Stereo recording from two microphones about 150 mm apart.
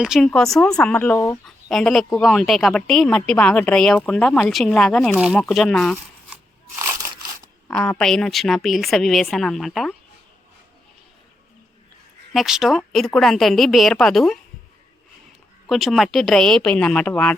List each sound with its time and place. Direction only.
0.0 s speech: 5° right (ahead or behind)
6.3 s crunch: 20° right (ahead or behind)
7.7 s speech: 5° left (ahead or behind)
12.3 s speech: centre (ahead or behind)
15.6 s speech: centre (ahead or behind)